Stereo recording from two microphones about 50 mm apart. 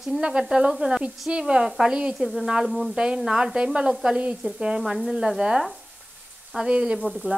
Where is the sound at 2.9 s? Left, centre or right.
Centre.